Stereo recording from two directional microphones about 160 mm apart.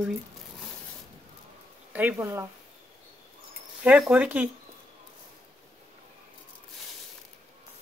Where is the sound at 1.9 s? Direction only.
15° right (ahead or behind).